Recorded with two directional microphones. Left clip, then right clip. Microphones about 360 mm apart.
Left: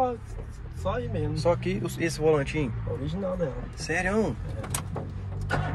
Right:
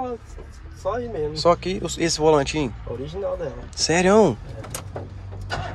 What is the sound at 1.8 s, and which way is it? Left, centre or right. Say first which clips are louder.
Speech: right 6 dB; centre.